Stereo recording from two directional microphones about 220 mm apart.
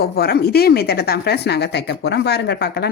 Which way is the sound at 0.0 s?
45° left (ahead or behind).